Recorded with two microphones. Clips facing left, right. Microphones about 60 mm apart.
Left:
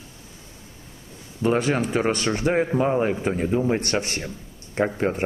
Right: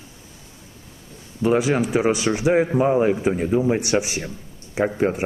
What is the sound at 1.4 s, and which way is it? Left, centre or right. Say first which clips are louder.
Speech: right 2 dB; centre.